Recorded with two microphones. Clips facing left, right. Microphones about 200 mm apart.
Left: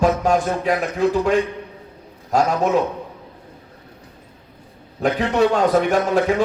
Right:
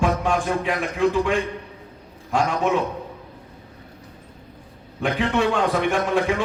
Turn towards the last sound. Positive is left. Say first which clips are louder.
# left 4 dB
turn(degrees=40)  # may be behind; listen again after turning